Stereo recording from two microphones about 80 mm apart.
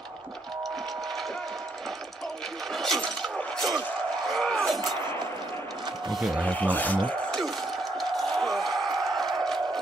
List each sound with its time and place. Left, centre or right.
2.7 s breaking: centre
3.0 s shatter: centre
6.1 s speech: centre
6.4 s speech: centre
7.1 s a sound: centre